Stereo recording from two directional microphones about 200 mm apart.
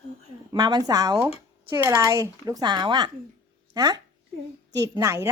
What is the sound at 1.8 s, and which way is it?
Cutlery, 15° right (ahead or behind).